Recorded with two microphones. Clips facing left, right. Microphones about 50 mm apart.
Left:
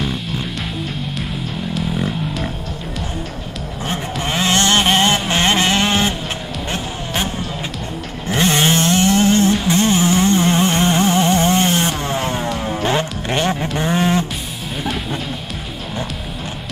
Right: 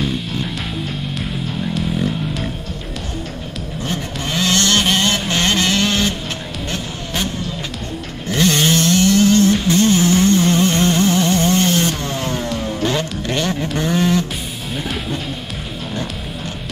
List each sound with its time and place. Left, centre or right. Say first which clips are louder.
2.0 s a sound: right 1 dB; centre
3.9 s vehicle: left 2 dB; left
8.4 s vehicle: even; left